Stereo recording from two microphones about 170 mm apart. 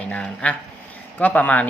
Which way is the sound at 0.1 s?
5° left (ahead or behind).